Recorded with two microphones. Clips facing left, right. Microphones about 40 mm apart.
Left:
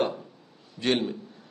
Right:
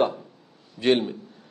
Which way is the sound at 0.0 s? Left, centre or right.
Centre.